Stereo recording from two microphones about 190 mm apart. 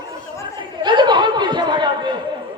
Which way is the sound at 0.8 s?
25° right (ahead or behind).